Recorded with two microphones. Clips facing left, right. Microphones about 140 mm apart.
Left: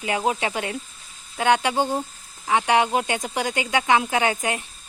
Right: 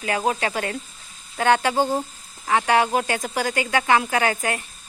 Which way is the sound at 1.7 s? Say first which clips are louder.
Right 2 dB; 10° right (ahead or behind).